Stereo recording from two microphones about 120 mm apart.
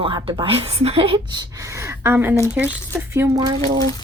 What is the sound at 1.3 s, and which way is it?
Speech, 30° right (ahead or behind).